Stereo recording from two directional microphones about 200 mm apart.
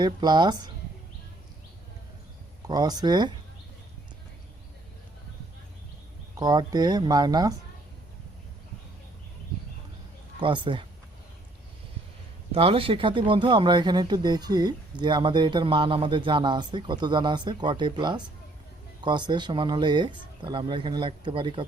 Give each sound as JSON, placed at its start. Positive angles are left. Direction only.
{"t": 0.0, "sound": "a man's voice", "side_deg": -20}
{"t": 2.6, "sound": "a man's voice", "side_deg": -20}
{"t": 6.4, "sound": "a man's voice", "side_deg": -20}
{"t": 10.4, "sound": "a man's voice", "side_deg": -25}
{"t": 12.5, "sound": "a man's voice", "side_deg": -30}